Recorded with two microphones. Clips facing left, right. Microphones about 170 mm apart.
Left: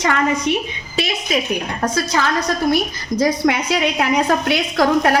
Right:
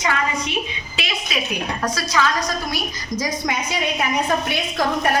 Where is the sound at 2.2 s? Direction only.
60° left (ahead or behind).